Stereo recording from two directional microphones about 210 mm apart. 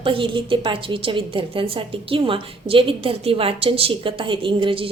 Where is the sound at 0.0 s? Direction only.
25° right (ahead or behind).